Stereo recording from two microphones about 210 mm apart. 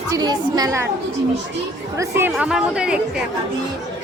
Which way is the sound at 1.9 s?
15° right (ahead or behind).